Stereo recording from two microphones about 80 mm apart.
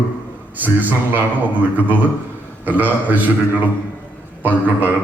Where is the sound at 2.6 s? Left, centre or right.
Right.